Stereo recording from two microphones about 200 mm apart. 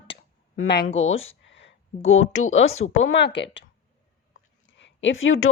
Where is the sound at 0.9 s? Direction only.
85° left.